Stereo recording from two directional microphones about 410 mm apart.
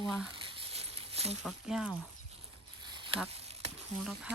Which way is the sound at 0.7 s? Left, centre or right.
Centre.